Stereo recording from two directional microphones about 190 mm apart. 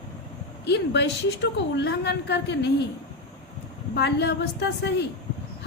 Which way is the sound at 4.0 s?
65° left (ahead or behind).